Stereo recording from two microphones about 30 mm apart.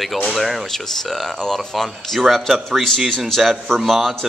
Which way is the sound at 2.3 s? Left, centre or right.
Centre.